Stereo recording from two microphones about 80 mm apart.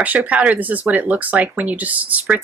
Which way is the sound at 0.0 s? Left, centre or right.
Centre.